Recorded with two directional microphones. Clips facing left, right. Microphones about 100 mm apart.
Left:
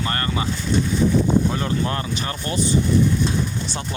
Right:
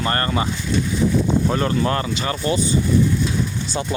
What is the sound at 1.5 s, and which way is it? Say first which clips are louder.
Speech: right 4 dB; 75° right (ahead or behind).